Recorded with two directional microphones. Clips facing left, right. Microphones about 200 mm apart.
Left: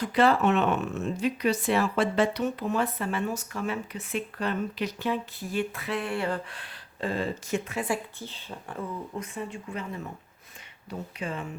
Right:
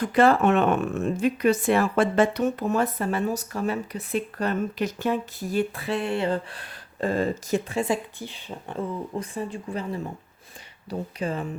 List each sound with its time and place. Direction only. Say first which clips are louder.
0.0 s speech: right 4 dB; 50° right (ahead or behind); by 6.6 s 25° right (ahead or behind)
6.6 s speech: right 5 dB; 45° right (ahead or behind)
7.7 s a woman's voice: right 6 dB; 25° right (ahead or behind)
8.2 s speech: right 4 dB; 15° right (ahead or behind); by 11.4 s 35° right (ahead or behind)